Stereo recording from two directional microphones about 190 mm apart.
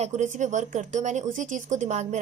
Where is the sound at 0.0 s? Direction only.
40° right (ahead or behind).